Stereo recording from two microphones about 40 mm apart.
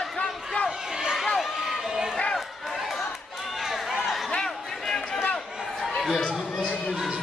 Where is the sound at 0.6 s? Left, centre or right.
Centre.